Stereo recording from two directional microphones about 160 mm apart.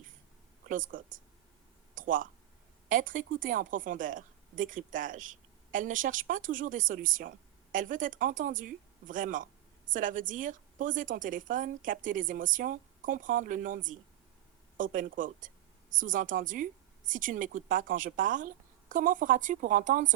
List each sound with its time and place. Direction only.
0.7 s a woman's voice: 55° right (ahead or behind)